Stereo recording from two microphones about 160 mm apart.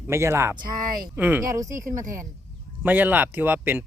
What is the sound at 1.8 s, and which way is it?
Speech, 55° right (ahead or behind).